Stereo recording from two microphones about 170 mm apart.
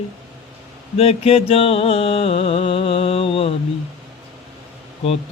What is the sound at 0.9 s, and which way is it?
Mantra, 35° left (ahead or behind).